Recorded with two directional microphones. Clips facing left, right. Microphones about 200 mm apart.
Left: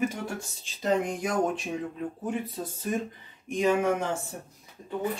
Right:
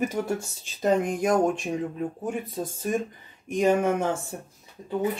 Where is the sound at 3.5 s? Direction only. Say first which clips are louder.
Right 2 dB; 45° right (ahead or behind).